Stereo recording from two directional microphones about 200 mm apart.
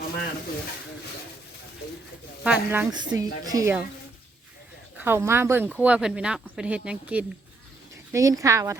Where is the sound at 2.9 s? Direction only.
20° right (ahead or behind).